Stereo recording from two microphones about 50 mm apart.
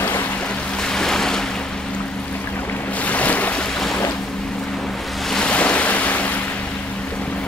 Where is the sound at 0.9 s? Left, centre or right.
Centre.